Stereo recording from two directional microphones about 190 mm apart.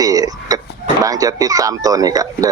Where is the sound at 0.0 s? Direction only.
20° right (ahead or behind).